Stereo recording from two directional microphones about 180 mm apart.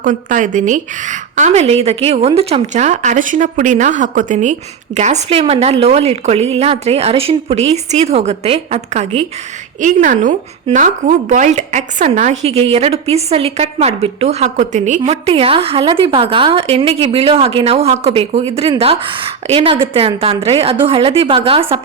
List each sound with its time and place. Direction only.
0.0 s a woman's voice: 45° right (ahead or behind); by 21.8 s 30° right (ahead or behind)